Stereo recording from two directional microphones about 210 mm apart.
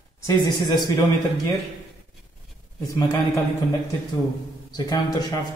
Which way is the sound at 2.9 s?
15° left (ahead or behind).